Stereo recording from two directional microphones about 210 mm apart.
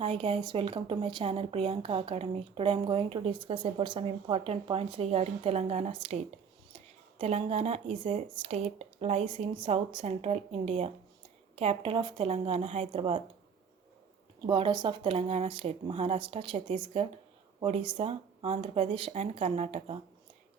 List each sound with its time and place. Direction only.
0.0 s speech: 25° right (ahead or behind)
14.4 s speech: 20° right (ahead or behind)